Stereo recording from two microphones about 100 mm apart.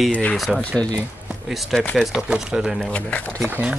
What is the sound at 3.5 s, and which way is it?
Speech, 15° right (ahead or behind).